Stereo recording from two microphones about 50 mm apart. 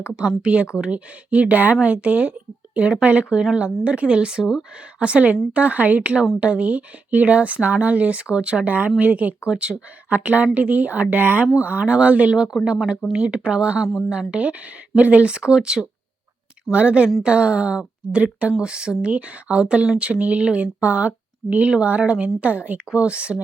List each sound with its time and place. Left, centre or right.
0.2 s a woman's voice: right
4.9 s a woman's voice: right
9.0 s speech: right
9.5 s a woman's voice: right
10.1 s a woman's voice: right; by 19.1 s centre
19.1 s a woman's voice: right